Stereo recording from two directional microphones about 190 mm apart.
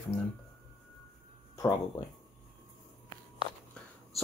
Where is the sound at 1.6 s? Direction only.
20° left (ahead or behind).